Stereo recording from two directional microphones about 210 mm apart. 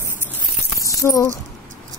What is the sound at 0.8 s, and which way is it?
Keys jangling, 15° left (ahead or behind).